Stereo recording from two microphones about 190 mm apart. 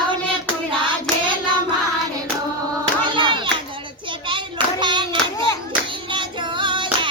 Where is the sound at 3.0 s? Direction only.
25° right (ahead or behind).